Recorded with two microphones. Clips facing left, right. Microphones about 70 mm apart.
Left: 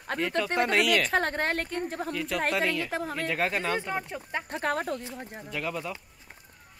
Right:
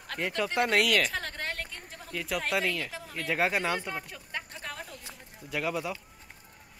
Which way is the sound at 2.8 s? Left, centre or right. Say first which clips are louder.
Left 10 dB; left.